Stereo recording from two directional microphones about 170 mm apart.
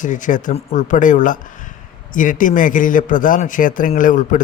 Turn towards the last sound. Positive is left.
turn(degrees=50)  # may be behind; listen again after turning